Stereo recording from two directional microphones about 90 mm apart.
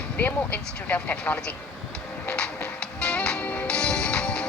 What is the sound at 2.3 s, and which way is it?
Music, 10° left (ahead or behind).